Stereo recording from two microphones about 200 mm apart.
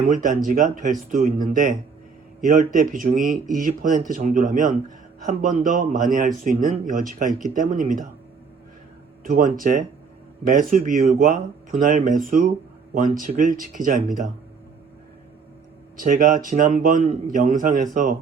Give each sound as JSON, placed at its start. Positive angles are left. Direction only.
{"t": 0.1, "sound": "a man's voice", "side_deg": -40}
{"t": 9.2, "sound": "a man's voice", "side_deg": -40}
{"t": 16.0, "sound": "a man's voice", "side_deg": -45}